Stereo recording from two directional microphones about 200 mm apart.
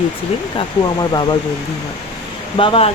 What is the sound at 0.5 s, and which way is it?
Speech, 25° left (ahead or behind).